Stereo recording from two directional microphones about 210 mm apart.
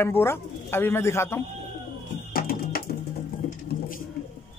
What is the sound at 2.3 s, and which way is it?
Music, 45° left (ahead or behind).